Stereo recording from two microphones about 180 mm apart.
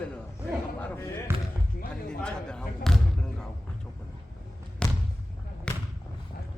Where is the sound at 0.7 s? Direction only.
10° left (ahead or behind).